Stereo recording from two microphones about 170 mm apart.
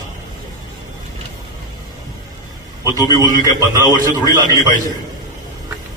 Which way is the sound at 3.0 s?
20° left (ahead or behind).